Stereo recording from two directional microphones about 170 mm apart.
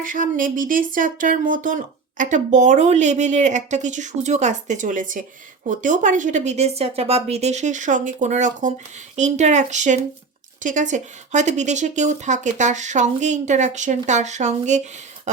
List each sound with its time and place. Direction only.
0.0 s speech: 50° right (ahead or behind)